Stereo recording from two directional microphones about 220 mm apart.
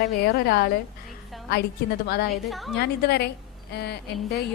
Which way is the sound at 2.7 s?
45° left (ahead or behind).